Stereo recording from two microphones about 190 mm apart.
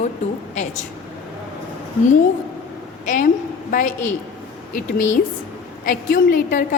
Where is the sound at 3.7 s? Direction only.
45° left (ahead or behind).